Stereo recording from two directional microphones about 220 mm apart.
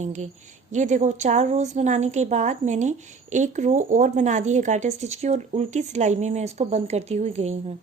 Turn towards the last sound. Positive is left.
turn(degrees=-30)  # may be behind; listen again after turning